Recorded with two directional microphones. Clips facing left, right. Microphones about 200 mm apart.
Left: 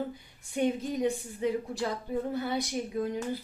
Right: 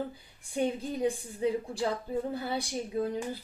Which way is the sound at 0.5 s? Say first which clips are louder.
Left 2 dB; 30° right (ahead or behind).